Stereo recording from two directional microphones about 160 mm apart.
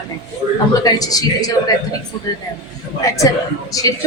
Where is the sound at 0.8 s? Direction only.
25° left (ahead or behind).